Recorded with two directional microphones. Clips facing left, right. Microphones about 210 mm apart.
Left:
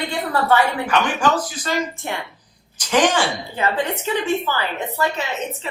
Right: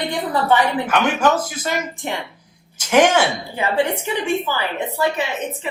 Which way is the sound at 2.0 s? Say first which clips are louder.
Right 2 dB; 15° right (ahead or behind).